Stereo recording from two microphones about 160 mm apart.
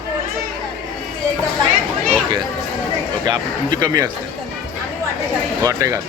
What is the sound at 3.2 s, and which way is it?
Speech, 25° right (ahead or behind).